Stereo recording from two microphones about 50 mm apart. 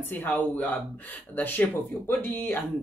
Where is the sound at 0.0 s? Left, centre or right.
Left.